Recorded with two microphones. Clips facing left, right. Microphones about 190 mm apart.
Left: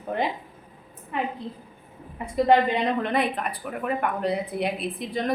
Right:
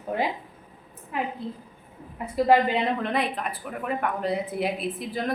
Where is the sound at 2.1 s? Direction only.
5° right (ahead or behind).